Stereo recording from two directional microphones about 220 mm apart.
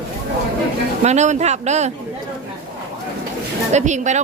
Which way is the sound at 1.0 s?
30° right (ahead or behind).